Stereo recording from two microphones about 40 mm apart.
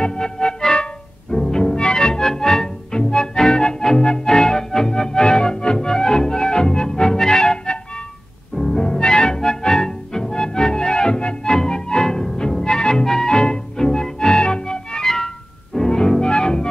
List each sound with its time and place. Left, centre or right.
0.0 s music: centre